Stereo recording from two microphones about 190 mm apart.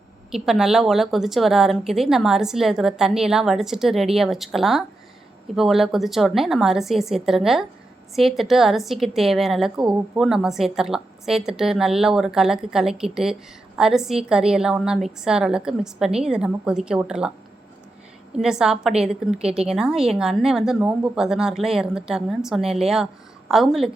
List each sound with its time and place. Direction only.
0.3 s a woman's voice: centre (ahead or behind)
18.3 s a woman's voice: 5° right (ahead or behind)